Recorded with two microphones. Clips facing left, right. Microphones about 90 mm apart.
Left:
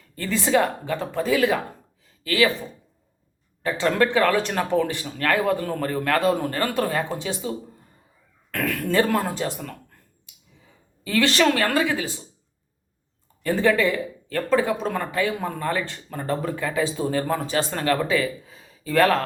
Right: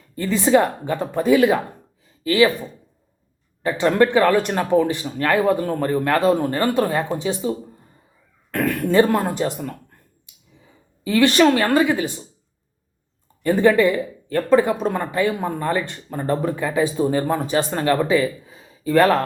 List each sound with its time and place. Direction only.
0.2 s speech: 15° right (ahead or behind)
11.0 s a woman's voice: 15° right (ahead or behind)
13.4 s speech: 15° right (ahead or behind)